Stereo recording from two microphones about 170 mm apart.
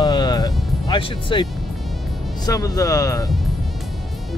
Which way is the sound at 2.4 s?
20° left (ahead or behind).